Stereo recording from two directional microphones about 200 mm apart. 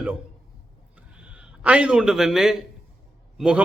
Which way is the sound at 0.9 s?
5° right (ahead or behind).